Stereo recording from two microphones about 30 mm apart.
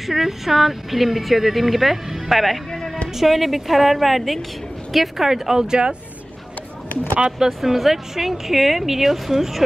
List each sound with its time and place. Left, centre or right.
0.0 s speech: centre
5.7 s speech: right
7.3 s speech: centre